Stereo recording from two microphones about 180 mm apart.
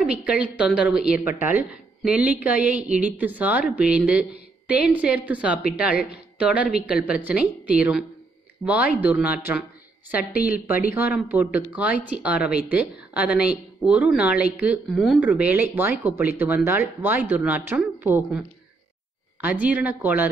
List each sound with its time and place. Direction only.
0.0 s a woman's voice: 5° right (ahead or behind)
19.4 s a woman's voice: 10° right (ahead or behind)